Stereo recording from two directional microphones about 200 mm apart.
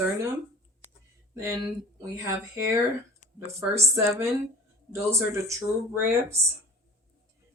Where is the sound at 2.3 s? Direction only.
15° right (ahead or behind).